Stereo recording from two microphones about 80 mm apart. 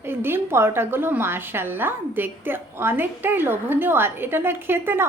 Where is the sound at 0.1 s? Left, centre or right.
Right.